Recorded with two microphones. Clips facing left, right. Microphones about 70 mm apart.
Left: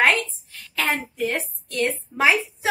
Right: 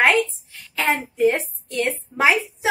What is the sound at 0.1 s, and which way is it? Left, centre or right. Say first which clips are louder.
A woman's voice: right 4 dB; centre.